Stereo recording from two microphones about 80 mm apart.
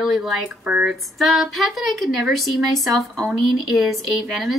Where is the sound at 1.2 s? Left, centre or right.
Centre.